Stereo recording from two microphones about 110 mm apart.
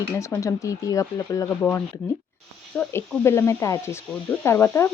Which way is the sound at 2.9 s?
25° left (ahead or behind).